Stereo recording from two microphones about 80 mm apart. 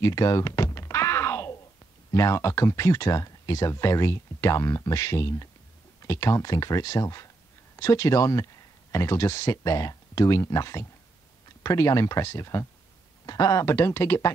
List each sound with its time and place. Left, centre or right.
0.0 s thunk: left
2.0 s speech: left
13.2 s speech: left